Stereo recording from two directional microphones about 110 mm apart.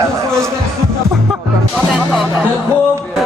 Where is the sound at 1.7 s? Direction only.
5° right (ahead or behind).